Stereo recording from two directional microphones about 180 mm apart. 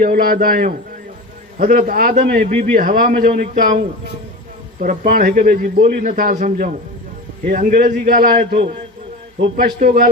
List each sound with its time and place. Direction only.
0.0 s a man's voice: 55° right (ahead or behind)